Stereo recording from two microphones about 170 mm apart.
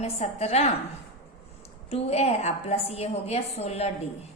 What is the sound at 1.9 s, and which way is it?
A woman's voice, 35° left (ahead or behind).